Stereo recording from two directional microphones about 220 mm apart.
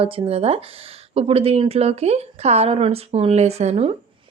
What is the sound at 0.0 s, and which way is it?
Speech, 25° right (ahead or behind).